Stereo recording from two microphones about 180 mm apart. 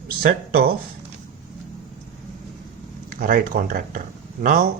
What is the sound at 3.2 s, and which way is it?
Speech, 50° right (ahead or behind).